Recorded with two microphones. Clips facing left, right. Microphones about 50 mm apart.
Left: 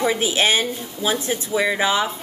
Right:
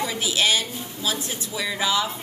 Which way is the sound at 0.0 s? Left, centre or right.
Left.